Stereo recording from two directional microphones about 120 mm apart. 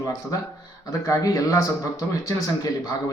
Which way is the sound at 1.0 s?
25° left (ahead or behind).